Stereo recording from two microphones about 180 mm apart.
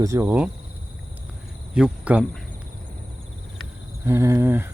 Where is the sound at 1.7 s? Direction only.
5° right (ahead or behind).